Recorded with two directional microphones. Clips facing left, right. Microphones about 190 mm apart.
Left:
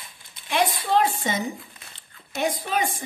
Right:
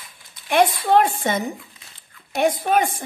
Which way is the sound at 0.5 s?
55° right (ahead or behind).